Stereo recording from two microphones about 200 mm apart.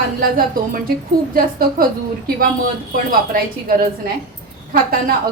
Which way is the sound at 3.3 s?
45° right (ahead or behind).